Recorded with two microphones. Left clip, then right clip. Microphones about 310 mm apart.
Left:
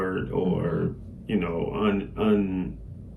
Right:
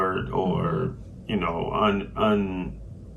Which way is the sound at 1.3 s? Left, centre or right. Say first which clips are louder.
Right 2 dB; centre.